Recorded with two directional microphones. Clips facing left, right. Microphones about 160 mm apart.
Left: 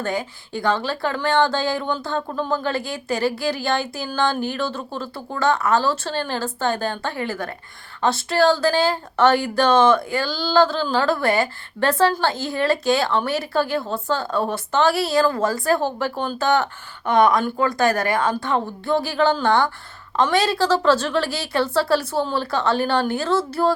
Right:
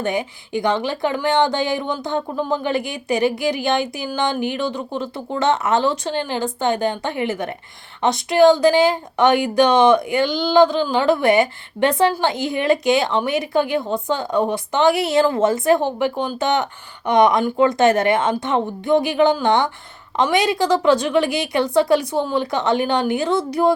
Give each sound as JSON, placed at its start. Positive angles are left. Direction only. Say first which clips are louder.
{"t": 0.0, "sound": "a woman's voice", "louder": "right 3 dB", "side_deg": -20}